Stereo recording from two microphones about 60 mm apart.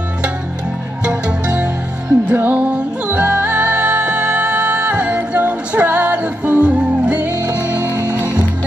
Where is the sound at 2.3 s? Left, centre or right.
Right.